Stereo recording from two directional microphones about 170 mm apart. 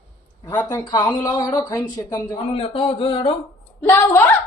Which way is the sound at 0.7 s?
25° left (ahead or behind).